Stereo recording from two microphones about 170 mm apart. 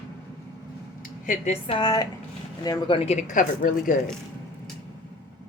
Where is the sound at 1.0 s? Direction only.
50° left (ahead or behind).